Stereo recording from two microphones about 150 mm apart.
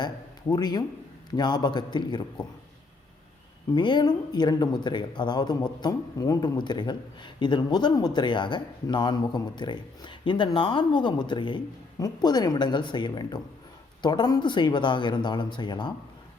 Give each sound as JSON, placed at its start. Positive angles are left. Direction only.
{"t": 0.0, "sound": "a man's voice", "side_deg": 25}
{"t": 3.8, "sound": "speech", "side_deg": 30}